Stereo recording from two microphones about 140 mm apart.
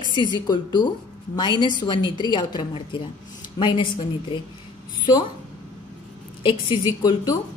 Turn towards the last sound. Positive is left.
turn(degrees=25)  # may be behind; listen again after turning